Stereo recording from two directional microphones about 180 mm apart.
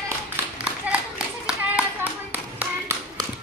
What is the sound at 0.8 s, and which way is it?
Clapping, 5° right (ahead or behind).